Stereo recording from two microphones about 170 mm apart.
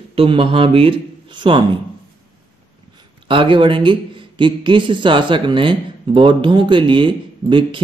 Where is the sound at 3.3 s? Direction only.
30° right (ahead or behind).